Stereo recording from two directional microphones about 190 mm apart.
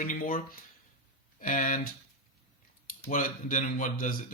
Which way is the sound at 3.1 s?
45° left (ahead or behind).